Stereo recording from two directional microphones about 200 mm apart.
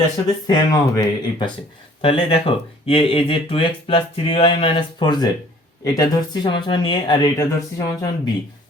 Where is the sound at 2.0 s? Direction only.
30° left (ahead or behind).